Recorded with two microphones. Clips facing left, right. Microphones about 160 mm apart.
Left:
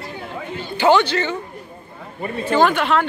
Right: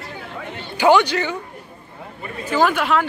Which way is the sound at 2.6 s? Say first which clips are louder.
Left 1 dB; 5° right (ahead or behind).